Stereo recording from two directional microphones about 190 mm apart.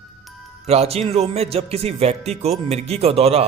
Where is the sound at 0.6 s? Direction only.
35° right (ahead or behind).